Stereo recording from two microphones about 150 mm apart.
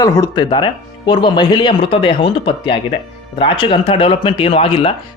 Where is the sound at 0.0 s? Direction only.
25° left (ahead or behind).